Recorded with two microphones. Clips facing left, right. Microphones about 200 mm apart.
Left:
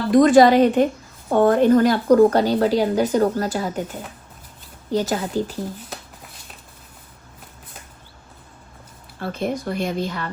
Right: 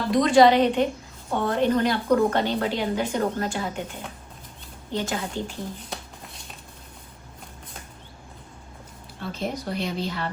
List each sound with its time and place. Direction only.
0.1 s a woman's voice: 50° left (ahead or behind)
4.9 s a woman's voice: 40° left (ahead or behind)
5.9 s a sound: 5° left (ahead or behind)
9.2 s speech: 55° left (ahead or behind)